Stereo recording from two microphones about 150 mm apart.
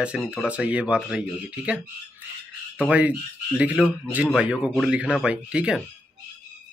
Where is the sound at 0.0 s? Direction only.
5° right (ahead or behind).